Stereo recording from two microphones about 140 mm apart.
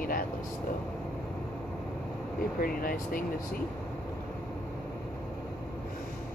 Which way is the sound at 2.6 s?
90° left.